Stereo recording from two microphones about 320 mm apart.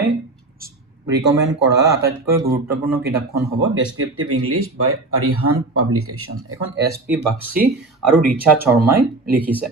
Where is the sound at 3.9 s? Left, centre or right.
Right.